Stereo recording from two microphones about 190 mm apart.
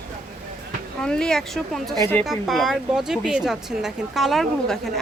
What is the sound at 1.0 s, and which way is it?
Speech, 5° left (ahead or behind).